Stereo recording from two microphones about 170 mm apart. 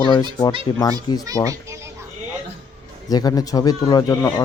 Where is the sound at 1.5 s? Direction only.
20° right (ahead or behind).